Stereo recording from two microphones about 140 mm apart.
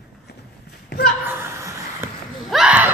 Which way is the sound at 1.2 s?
20° right (ahead or behind).